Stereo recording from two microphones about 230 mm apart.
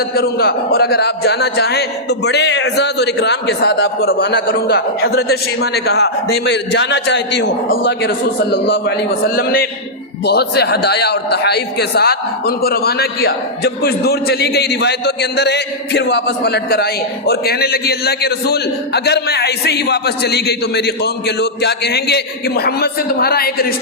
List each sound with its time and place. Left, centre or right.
0.1 s a man's voice: left